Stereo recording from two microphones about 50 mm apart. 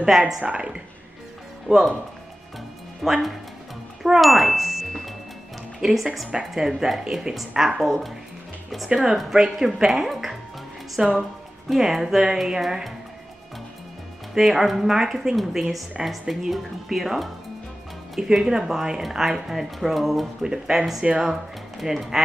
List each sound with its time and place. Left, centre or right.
0.4 s a woman's voice: right
1.7 s speech: centre
3.0 s a woman's voice: centre
14.3 s a woman's voice: centre